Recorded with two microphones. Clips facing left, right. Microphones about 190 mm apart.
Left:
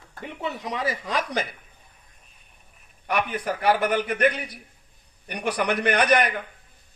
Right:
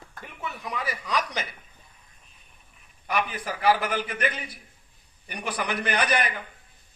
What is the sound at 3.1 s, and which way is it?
A man's voice, 60° left (ahead or behind).